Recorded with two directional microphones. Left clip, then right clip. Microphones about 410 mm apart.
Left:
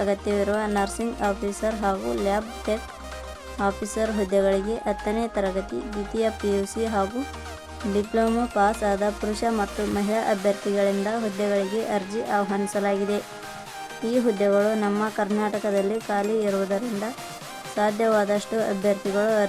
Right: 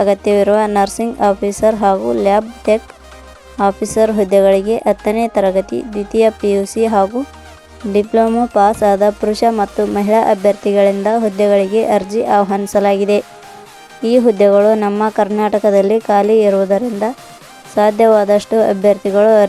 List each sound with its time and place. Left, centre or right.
0.0 s speech: centre